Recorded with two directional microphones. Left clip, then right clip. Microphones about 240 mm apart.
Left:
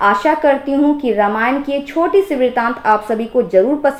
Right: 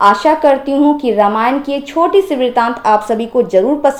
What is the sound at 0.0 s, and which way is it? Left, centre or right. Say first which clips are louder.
Speech: right 3 dB; right.